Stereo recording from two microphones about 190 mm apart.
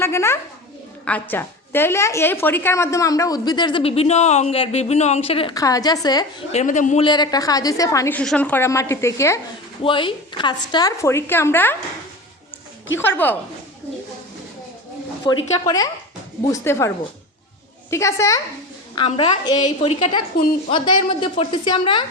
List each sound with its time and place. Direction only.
0.0 s a woman's voice: 15° left (ahead or behind); by 5.5 s 30° left (ahead or behind)
5.5 s a woman's voice: 20° left (ahead or behind)
6.5 s a man's voice: 40° left (ahead or behind)
7.0 s a woman's voice: 20° left (ahead or behind)
9.8 s a woman's voice: 25° left (ahead or behind)
13.0 s a woman's voice: 10° left (ahead or behind)
15.5 s a woman's voice: 20° left (ahead or behind)
17.9 s a woman's voice: 15° left (ahead or behind)
18.9 s a woman's voice: 30° left (ahead or behind)